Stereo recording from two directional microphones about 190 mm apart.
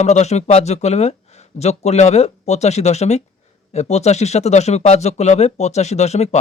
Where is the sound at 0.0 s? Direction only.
35° left (ahead or behind).